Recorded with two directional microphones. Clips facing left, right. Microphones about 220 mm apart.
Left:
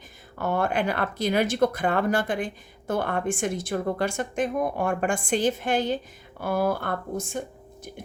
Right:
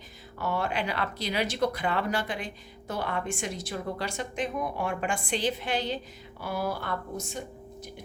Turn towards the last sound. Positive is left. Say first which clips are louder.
# left 5 dB
turn(degrees=50)  # may be behind; listen again after turning